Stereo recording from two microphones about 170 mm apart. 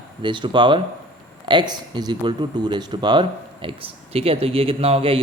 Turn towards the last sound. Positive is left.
turn(degrees=-35)  # may be behind; listen again after turning